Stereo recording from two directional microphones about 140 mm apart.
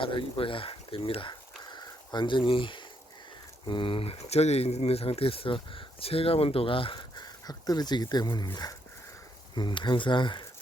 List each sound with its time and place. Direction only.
0.0 s speech: 40° left (ahead or behind)
9.6 s speech: 35° left (ahead or behind)